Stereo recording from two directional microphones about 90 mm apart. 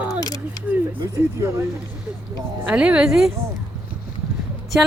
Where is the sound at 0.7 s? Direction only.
20° right (ahead or behind).